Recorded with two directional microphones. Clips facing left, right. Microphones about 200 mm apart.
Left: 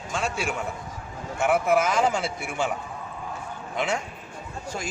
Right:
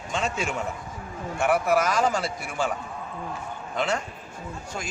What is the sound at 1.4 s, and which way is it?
Speech, 20° left (ahead or behind).